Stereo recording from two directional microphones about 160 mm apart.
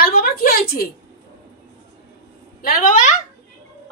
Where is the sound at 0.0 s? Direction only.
70° left (ahead or behind).